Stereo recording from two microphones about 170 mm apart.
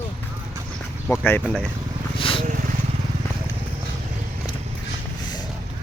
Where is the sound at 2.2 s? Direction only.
30° left (ahead or behind).